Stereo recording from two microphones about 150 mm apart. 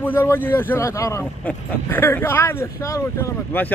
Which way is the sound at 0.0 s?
15° left (ahead or behind).